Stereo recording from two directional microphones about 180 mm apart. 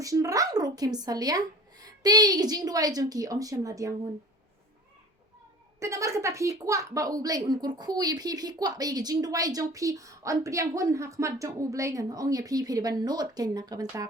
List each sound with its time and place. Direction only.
0.0 s speech: 20° right (ahead or behind)
5.8 s speech: 15° right (ahead or behind)